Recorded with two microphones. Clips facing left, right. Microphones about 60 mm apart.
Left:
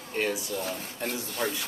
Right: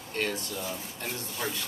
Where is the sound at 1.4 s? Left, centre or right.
Centre.